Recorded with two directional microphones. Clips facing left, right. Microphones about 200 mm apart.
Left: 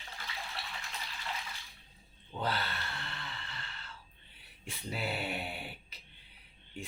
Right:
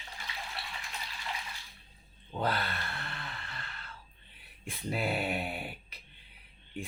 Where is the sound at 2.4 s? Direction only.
55° right (ahead or behind).